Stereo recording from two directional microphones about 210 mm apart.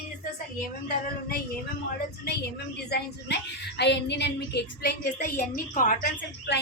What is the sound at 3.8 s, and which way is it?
A woman's voice, 55° left (ahead or behind).